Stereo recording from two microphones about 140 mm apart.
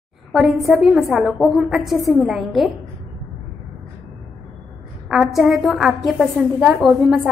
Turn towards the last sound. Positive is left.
turn(degrees=-5)  # may be behind; listen again after turning